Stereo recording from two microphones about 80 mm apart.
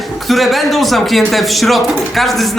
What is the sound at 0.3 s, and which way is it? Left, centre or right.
Speech, centre.